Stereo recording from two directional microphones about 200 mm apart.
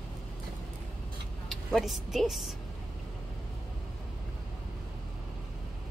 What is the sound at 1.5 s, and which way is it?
Speech, centre (ahead or behind).